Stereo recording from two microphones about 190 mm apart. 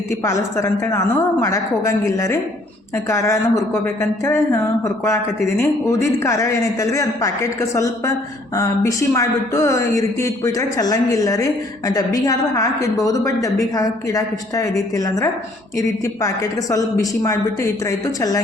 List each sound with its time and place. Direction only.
0.1 s a woman's voice: 15° left (ahead or behind)